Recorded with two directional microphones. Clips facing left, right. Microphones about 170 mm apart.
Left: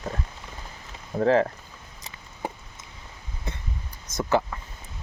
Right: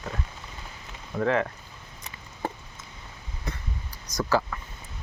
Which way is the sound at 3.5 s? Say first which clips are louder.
Right 1 dB; 25° left (ahead or behind).